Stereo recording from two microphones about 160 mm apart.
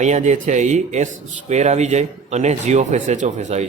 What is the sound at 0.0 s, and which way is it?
Speech, 45° right (ahead or behind).